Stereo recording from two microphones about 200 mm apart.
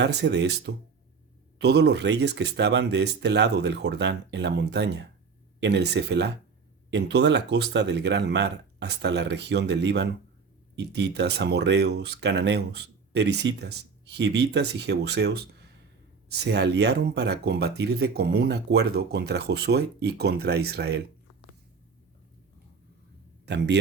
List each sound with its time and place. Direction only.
0.0 s speech: 60° right (ahead or behind)
16.4 s speech: 55° right (ahead or behind)
23.5 s speech: 60° right (ahead or behind)